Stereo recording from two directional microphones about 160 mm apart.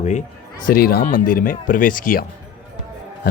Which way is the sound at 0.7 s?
70° left (ahead or behind).